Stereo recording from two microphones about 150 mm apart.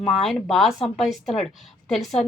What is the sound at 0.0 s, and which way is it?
A woman's voice, centre (ahead or behind).